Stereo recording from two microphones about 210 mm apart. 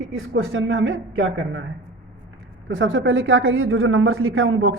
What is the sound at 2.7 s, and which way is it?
A woman's voice, 65° right (ahead or behind).